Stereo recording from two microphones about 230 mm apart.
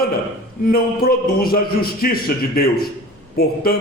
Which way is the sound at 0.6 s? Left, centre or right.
Left.